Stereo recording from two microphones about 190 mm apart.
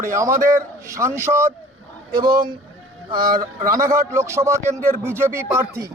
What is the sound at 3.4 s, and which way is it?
Speech, 15° right (ahead or behind).